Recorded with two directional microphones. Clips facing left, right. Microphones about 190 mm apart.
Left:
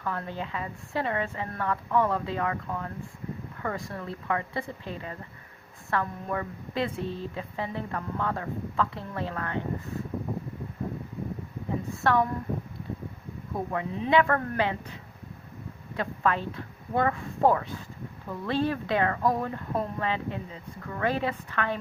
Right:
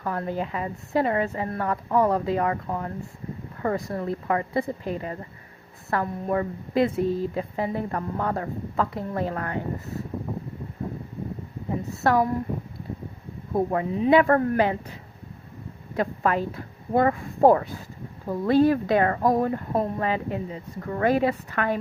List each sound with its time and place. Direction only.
0.0 s a woman's voice: 35° right (ahead or behind)
12.0 s a woman's voice: 35° right (ahead or behind)
13.5 s a woman's voice: 35° right (ahead or behind)
16.0 s a woman's voice: 35° right (ahead or behind)